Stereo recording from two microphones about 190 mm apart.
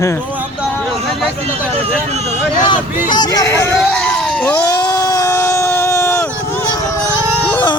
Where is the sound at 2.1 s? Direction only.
35° right (ahead or behind).